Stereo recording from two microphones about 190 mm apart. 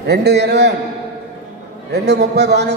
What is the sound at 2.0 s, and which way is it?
Speech, 60° right (ahead or behind).